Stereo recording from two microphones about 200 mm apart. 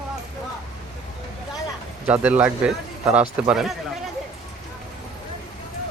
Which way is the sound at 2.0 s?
5° right (ahead or behind).